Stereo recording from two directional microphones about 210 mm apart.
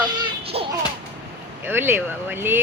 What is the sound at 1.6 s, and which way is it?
Speech, 10° right (ahead or behind).